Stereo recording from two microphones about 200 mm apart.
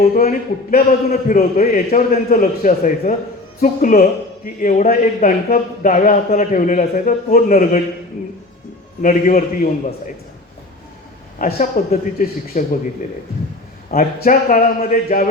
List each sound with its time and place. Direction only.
0.1 s a man's voice: 45° left (ahead or behind)
9.0 s speech: 40° left (ahead or behind)
11.5 s a man's voice: 45° left (ahead or behind)